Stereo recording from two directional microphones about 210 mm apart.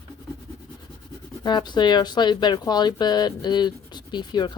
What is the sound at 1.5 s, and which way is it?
Speech, 20° left (ahead or behind).